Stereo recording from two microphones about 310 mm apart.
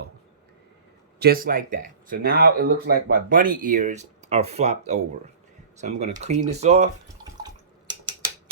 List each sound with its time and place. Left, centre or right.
1.2 s speech: right
7.4 s drip: centre